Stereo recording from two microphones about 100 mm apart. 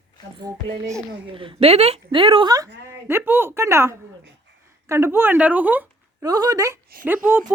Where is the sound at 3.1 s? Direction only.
20° right (ahead or behind).